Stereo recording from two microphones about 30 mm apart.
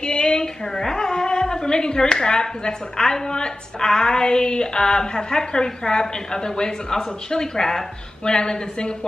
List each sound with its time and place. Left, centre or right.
0.0 s a sound: left
0.7 s speech: centre
8.3 s speech: left